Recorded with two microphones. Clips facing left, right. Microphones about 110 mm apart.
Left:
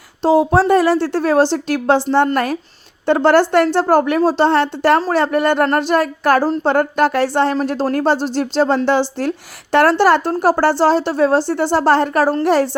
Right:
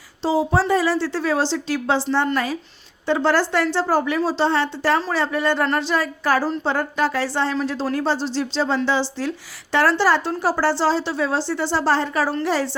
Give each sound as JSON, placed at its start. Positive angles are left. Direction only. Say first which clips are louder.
{"t": 0.2, "sound": "a woman's voice", "louder": "left 7 dB", "side_deg": 60}